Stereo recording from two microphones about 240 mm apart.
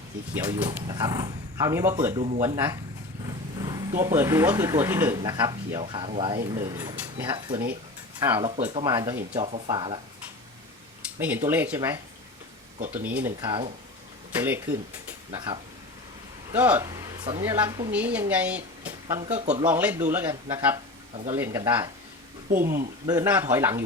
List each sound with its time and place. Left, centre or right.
0.6 s speech: centre
2.1 s speech: right
9.3 s speech: right
11.2 s speech: centre
13.1 s speech: centre
19.4 s speech: right
19.6 s speech: centre
22.4 s speech: right
23.0 s speech: centre